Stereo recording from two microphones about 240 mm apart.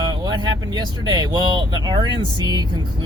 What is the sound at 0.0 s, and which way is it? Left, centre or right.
Speech, centre.